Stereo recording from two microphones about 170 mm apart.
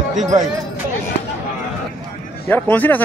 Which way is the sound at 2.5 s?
10° left (ahead or behind).